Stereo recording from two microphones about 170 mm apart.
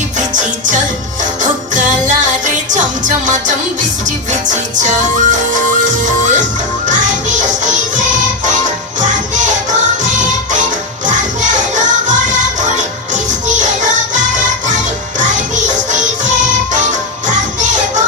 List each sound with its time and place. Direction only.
0.2 s music: 45° right (ahead or behind)
6.8 s music: 45° right (ahead or behind)